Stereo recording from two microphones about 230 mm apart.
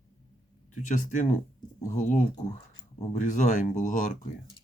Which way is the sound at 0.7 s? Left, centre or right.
Left.